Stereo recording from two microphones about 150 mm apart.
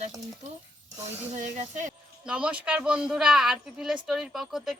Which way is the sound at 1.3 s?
55° right (ahead or behind).